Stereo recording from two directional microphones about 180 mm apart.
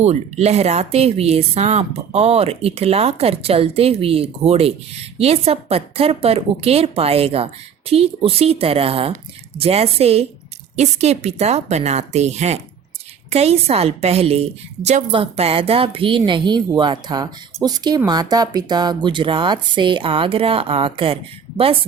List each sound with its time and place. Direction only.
0.0 s a woman's voice: 35° right (ahead or behind)